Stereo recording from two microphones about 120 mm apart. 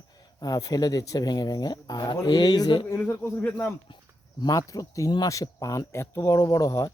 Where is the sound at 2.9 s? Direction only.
25° left (ahead or behind).